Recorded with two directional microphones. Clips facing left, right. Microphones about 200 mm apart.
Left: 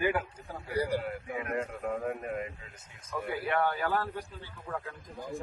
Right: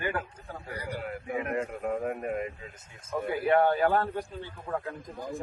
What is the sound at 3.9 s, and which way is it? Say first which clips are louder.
Speech: right 5 dB; 55° right (ahead or behind).